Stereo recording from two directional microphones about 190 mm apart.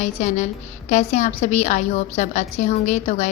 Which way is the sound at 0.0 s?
35° left (ahead or behind).